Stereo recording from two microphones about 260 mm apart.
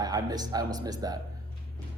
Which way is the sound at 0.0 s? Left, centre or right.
Centre.